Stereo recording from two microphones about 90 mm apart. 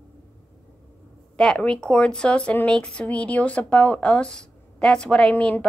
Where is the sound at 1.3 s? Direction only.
10° left (ahead or behind).